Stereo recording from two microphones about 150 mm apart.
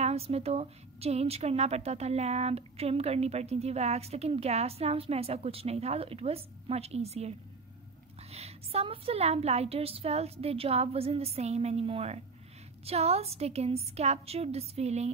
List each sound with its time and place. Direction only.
0.0 s a woman's voice: 40° right (ahead or behind)